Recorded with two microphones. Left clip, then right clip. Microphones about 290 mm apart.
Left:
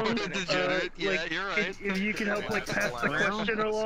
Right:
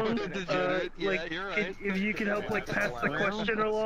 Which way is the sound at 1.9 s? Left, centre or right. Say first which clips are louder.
Left 1 dB; centre.